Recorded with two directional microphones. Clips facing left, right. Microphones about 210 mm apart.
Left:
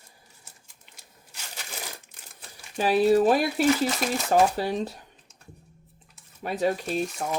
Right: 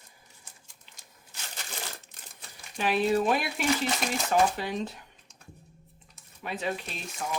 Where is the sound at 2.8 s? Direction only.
35° left (ahead or behind).